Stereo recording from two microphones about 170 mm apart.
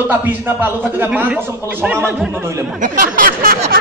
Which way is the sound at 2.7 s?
50° right (ahead or behind).